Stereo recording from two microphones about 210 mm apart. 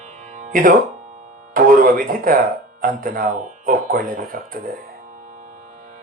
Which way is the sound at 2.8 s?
45° right (ahead or behind).